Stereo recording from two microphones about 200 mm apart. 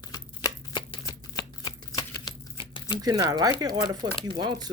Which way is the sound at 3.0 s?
20° right (ahead or behind).